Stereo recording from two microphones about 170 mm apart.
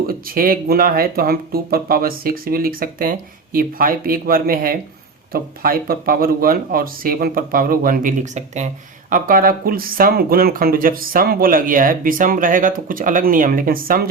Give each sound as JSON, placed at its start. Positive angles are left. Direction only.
{"t": 0.1, "sound": "speech", "side_deg": -55}